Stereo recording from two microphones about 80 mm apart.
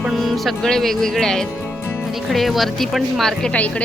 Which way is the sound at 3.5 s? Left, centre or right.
Centre.